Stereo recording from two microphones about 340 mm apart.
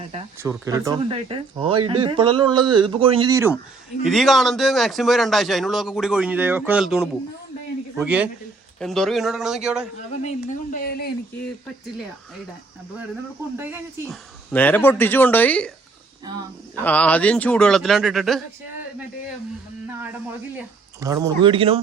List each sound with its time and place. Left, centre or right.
0.3 s speech: centre
4.0 s a man's voice: centre
10.1 s speech: left
13.6 s a man's voice: centre
14.5 s a man's voice: centre
16.8 s a man's voice: centre
21.0 s speech: centre